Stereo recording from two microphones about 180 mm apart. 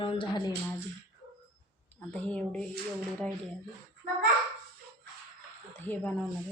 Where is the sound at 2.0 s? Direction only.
10° left (ahead or behind).